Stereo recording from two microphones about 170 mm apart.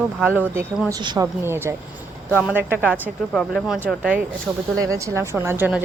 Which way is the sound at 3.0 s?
5° left (ahead or behind).